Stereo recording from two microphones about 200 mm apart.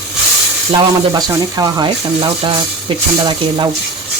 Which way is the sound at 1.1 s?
20° right (ahead or behind).